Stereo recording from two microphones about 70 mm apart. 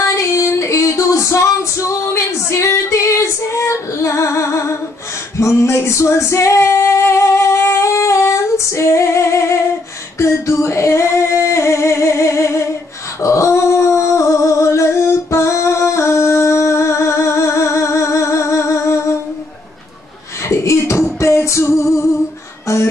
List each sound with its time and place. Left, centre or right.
0.0 s music: left
5.4 s singing: left
10.1 s female singing: left
13.2 s dog: left
20.4 s beatboxing: left
21.2 s music: left